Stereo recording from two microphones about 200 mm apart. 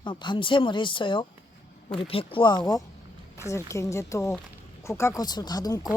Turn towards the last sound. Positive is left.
turn(degrees=20)  # may be behind; listen again after turning